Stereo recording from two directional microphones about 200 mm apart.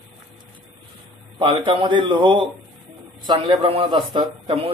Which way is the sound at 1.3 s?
25° right (ahead or behind).